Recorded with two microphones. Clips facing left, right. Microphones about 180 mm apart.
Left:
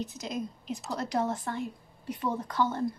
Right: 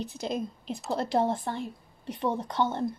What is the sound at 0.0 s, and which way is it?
A woman's voice, 30° right (ahead or behind).